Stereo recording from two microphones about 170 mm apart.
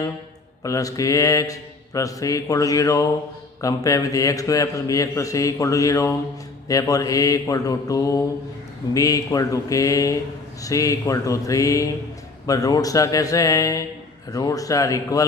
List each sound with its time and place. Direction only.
0.6 s a man's voice: 20° left (ahead or behind)